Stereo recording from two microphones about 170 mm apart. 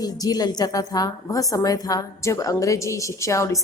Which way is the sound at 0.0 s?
20° left (ahead or behind).